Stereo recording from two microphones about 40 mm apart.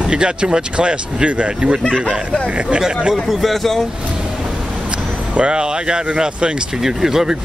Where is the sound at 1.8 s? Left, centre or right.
Centre.